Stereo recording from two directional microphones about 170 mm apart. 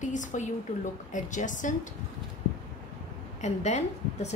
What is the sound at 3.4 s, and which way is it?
Speech, 40° left (ahead or behind).